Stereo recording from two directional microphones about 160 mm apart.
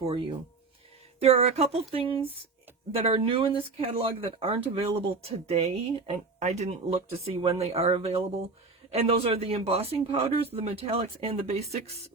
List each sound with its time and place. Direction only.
0.0 s speech: 35° right (ahead or behind)